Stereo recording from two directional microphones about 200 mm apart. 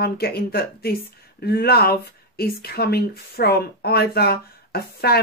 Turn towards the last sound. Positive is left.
turn(degrees=50)  # may be behind; listen again after turning